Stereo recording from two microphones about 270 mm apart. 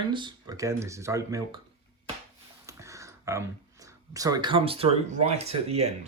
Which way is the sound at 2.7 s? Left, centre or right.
Centre.